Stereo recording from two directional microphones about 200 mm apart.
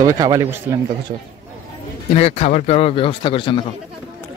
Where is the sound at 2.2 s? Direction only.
30° left (ahead or behind).